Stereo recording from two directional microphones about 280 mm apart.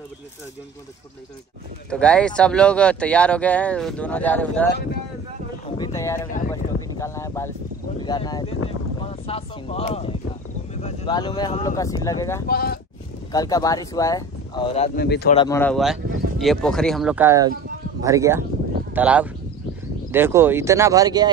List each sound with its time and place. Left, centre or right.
1.9 s speech: centre
5.9 s speech: centre
6.5 s a sound: centre
8.0 s speech: centre
12.4 s speech: left
13.3 s speech: centre
15.0 s speech: left
15.3 s speech: centre